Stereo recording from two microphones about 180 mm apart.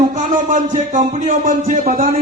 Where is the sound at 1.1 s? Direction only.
45° right (ahead or behind).